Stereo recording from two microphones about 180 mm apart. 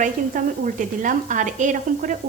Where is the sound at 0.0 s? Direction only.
45° right (ahead or behind).